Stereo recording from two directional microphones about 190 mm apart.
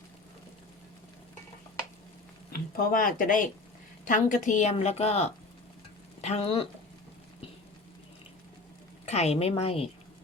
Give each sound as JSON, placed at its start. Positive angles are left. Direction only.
{"t": 2.5, "sound": "a woman's voice", "side_deg": 50}
{"t": 9.0, "sound": "a woman's voice", "side_deg": 35}